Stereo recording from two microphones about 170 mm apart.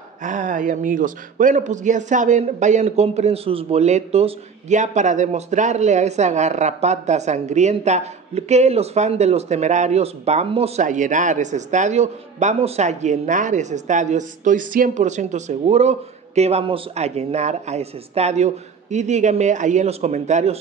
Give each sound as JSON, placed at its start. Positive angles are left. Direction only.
{"t": 0.2, "sound": "speech", "side_deg": -50}